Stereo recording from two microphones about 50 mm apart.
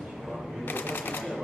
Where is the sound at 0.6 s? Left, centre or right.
Left.